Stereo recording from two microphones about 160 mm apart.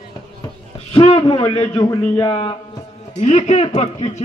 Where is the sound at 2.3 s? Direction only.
30° left (ahead or behind).